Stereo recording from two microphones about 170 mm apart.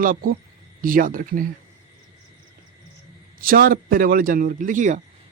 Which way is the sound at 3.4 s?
60° right (ahead or behind).